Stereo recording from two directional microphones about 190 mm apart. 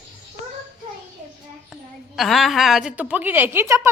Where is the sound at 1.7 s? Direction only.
Centre (ahead or behind).